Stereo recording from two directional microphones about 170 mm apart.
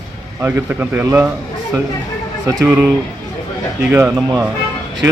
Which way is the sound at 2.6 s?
10° right (ahead or behind).